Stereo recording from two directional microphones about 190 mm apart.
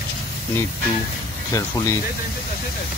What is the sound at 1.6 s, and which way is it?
Speech, 15° left (ahead or behind).